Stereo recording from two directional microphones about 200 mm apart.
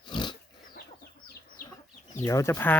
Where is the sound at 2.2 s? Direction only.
15° left (ahead or behind).